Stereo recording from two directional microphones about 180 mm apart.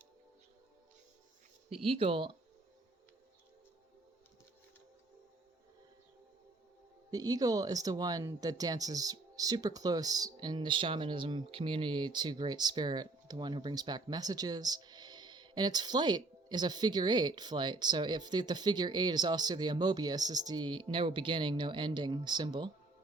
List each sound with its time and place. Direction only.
1.7 s speech: 30° right (ahead or behind)
7.1 s speech: 20° right (ahead or behind)